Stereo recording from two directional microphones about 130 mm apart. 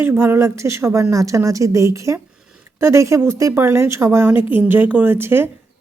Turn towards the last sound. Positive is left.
turn(degrees=-15)  # may be behind; listen again after turning